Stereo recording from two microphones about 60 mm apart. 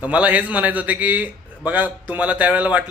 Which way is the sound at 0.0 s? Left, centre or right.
Right.